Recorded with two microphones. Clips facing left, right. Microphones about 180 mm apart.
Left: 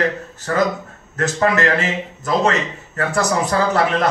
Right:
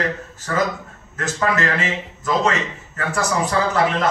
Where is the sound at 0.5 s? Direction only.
40° left (ahead or behind).